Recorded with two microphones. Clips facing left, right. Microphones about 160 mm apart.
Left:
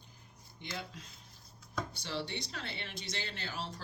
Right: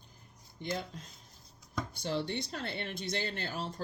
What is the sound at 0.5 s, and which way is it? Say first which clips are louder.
Speech: right 6 dB; 45° right (ahead or behind).